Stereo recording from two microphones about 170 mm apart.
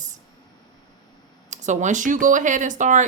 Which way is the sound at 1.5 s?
45° right (ahead or behind).